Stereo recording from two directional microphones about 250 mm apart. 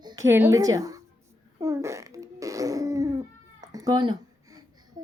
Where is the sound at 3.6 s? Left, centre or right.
Centre.